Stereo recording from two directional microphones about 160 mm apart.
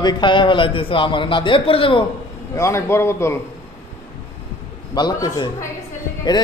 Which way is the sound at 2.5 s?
15° left (ahead or behind).